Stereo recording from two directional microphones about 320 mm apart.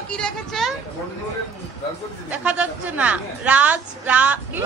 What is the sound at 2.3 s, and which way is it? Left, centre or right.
A woman's voice, centre.